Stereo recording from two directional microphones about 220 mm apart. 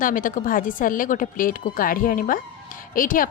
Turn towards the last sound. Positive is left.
turn(degrees=40)  # may be behind; listen again after turning